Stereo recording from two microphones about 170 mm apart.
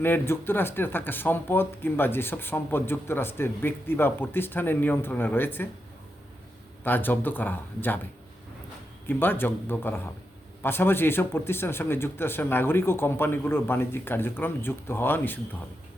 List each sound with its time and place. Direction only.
0.0 s speech: 10° left (ahead or behind)
6.8 s speech: 10° left (ahead or behind)
9.0 s speech: 10° left (ahead or behind)